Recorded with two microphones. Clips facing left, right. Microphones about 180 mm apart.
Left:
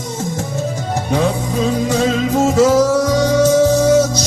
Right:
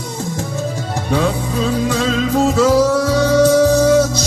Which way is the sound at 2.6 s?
15° left (ahead or behind).